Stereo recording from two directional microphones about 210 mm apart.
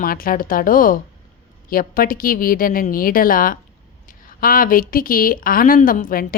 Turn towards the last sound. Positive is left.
turn(degrees=40)  # may be behind; listen again after turning